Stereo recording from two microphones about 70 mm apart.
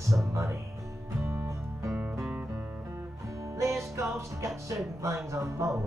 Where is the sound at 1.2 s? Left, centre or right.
Right.